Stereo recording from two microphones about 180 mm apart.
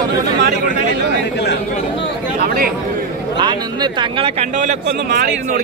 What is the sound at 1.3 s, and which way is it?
Speech, 70° left (ahead or behind).